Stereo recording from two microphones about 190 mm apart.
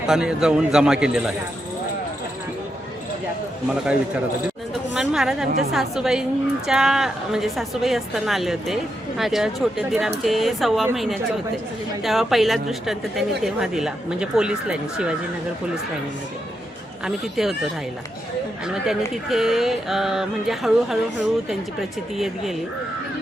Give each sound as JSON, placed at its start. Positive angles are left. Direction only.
{"t": 0.1, "sound": "a woman's voice", "side_deg": -5}
{"t": 3.7, "sound": "a woman's voice", "side_deg": -5}
{"t": 17.0, "sound": "a woman's voice", "side_deg": 0}